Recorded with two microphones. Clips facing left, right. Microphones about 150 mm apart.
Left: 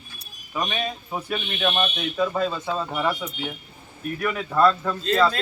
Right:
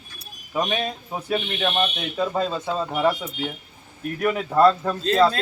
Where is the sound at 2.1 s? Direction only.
25° right (ahead or behind).